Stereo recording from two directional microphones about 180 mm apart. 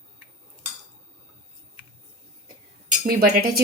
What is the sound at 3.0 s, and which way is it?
Speech, 55° right (ahead or behind).